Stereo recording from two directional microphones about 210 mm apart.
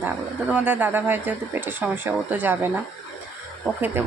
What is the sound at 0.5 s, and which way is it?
Speech, 10° right (ahead or behind).